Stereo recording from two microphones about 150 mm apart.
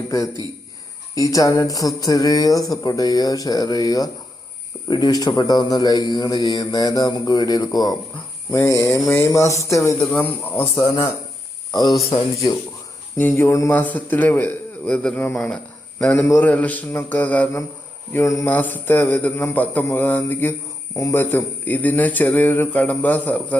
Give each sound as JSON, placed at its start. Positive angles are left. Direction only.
{"t": 1.1, "sound": "a man's voice", "side_deg": 25}
{"t": 10.8, "sound": "a man's voice", "side_deg": 30}
{"t": 13.1, "sound": "a man's voice", "side_deg": 15}